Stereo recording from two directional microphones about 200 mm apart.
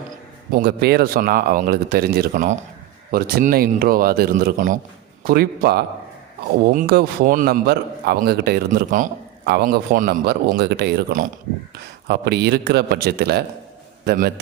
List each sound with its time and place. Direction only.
0.5 s a man's voice: 50° right (ahead or behind)